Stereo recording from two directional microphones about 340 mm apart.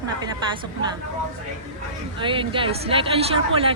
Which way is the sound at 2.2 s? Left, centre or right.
Centre.